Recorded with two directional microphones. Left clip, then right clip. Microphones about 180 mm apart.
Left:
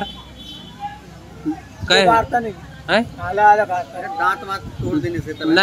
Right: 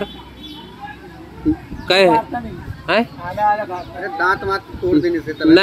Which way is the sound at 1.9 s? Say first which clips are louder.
Even; 15° left (ahead or behind).